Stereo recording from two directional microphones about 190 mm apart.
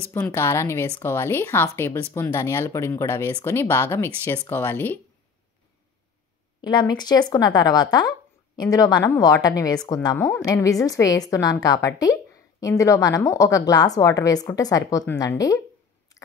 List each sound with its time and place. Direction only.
0.1 s a woman's voice: 10° left (ahead or behind)
6.6 s a woman's voice: 25° left (ahead or behind)